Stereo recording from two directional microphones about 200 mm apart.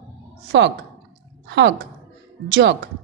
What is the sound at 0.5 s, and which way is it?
A woman's voice, 65° right (ahead or behind).